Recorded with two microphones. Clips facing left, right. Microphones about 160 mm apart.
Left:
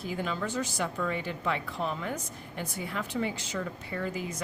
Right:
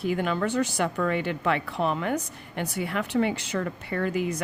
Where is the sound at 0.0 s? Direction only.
65° right (ahead or behind).